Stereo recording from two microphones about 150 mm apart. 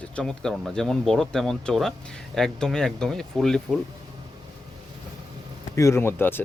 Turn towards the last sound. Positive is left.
turn(degrees=15)  # may be behind; listen again after turning